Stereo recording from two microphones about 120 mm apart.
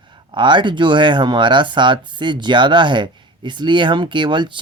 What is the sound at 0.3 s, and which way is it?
Speech, 40° right (ahead or behind).